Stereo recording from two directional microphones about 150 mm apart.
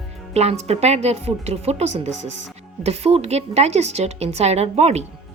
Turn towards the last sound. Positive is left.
turn(degrees=-45)  # may be behind; listen again after turning